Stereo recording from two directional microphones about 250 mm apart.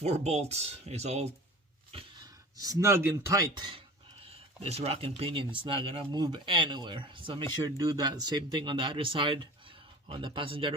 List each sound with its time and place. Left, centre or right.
0.0 s speech: right
2.6 s speech: centre